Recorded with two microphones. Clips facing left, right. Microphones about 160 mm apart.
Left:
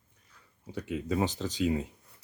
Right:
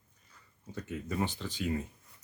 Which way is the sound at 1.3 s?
40° left (ahead or behind).